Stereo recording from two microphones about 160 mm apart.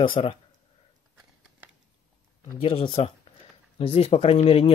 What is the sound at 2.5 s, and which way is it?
Speech, 35° left (ahead or behind).